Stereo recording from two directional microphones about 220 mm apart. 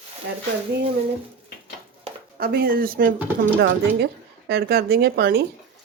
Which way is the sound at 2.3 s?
40° right (ahead or behind).